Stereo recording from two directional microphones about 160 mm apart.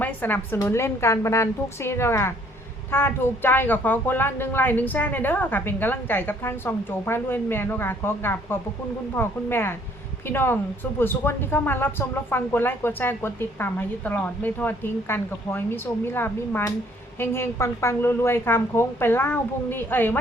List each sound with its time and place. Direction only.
0.0 s speech: 10° left (ahead or behind)